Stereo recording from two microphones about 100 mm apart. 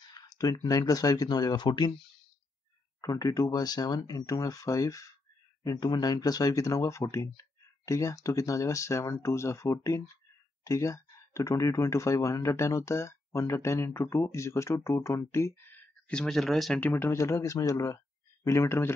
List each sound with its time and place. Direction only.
0.0 s speech: 40° left (ahead or behind)
3.0 s speech: 35° left (ahead or behind)
16.1 s speech: 5° left (ahead or behind)
16.8 s speech: 20° left (ahead or behind)